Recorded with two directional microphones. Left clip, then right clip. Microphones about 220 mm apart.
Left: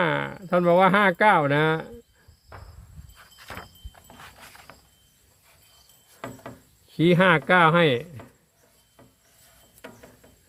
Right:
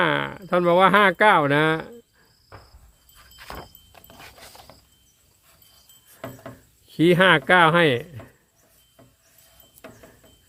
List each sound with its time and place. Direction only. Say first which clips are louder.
0.0 s speech: right 3 dB; 20° right (ahead or behind)
6.9 s speech: right 3 dB; 20° right (ahead or behind)